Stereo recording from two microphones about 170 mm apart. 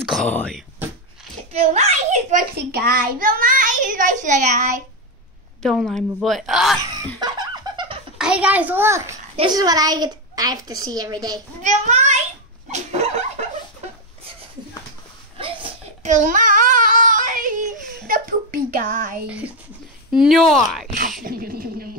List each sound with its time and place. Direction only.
0.0 s speech: centre (ahead or behind)
1.5 s a sound: 40° right (ahead or behind)
2.3 s child singing: 65° right (ahead or behind); by 4.7 s 45° right (ahead or behind)
5.6 s a woman's voice: centre (ahead or behind)
7.2 s laughter: 25° right (ahead or behind)
8.2 s a child's voice: 5° right (ahead or behind); by 11.4 s 25° right (ahead or behind)
11.6 s child singing: 45° right (ahead or behind)
12.7 s a sound: 40° right (ahead or behind)
15.3 s sneeze: 35° right (ahead or behind)
16.1 s a sound: 50° right (ahead or behind)
19.2 s a child's voice: 10° right (ahead or behind)
21.2 s speech: 55° right (ahead or behind)